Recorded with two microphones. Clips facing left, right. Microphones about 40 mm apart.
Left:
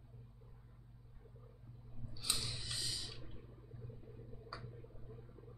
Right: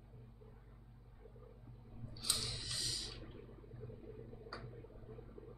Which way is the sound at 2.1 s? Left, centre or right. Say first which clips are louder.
Even; centre.